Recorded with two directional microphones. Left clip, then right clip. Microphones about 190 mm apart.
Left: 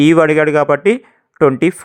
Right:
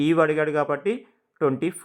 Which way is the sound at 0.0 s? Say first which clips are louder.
Left 10 dB; 35° left (ahead or behind).